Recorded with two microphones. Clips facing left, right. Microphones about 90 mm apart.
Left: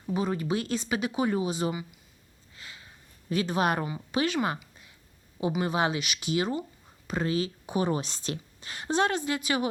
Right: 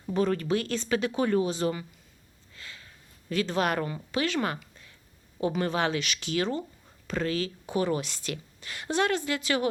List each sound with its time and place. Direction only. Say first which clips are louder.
0.1 s a woman's voice: right 2 dB; 10° left (ahead or behind)